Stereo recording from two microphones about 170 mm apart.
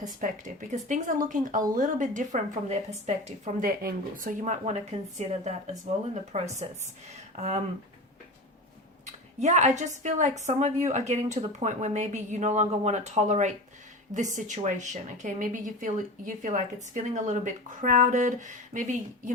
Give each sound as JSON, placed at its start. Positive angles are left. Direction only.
{"t": 0.2, "sound": "speech", "side_deg": -50}
{"t": 9.0, "sound": "speech", "side_deg": -45}